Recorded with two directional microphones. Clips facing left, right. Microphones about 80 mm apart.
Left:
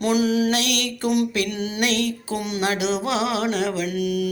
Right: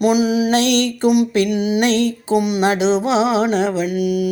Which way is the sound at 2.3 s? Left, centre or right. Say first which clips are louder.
Right 13 dB; centre.